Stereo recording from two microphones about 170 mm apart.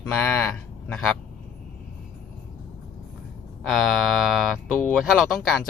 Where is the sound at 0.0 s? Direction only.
5° left (ahead or behind).